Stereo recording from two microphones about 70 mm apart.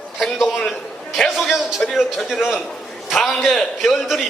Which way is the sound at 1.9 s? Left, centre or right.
Centre.